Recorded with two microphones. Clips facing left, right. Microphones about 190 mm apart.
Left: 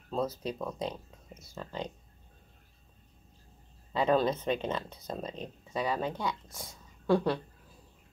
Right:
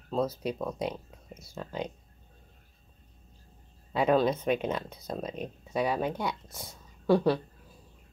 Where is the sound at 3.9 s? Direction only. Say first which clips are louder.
Right 2 dB; 10° right (ahead or behind).